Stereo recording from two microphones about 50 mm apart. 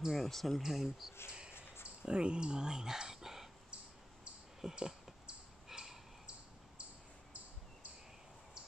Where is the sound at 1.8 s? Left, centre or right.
Centre.